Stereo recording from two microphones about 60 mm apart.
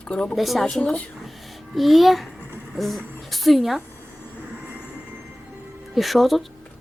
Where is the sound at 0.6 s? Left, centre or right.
Centre.